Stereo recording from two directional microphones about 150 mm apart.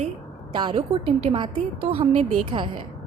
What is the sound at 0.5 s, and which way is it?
Speech, 35° right (ahead or behind).